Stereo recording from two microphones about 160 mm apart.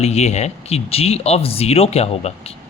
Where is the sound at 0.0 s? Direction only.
40° left (ahead or behind).